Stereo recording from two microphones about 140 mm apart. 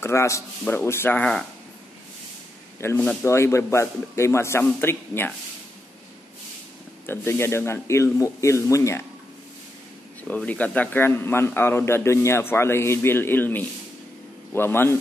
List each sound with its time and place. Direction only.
0.0 s a man's voice: 20° left (ahead or behind)
2.8 s a man's voice: 15° left (ahead or behind)
7.1 s speech: 20° left (ahead or behind)
10.2 s a man's voice: 10° left (ahead or behind)